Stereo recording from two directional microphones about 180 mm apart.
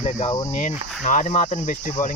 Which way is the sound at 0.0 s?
35° left (ahead or behind).